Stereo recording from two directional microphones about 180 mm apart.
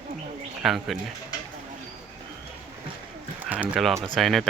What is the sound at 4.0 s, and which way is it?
Speech, centre (ahead or behind).